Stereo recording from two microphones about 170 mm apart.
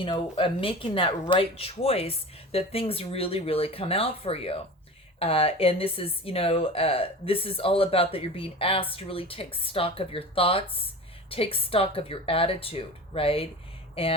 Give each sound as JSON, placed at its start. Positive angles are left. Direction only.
{"t": 0.0, "sound": "speech", "side_deg": 30}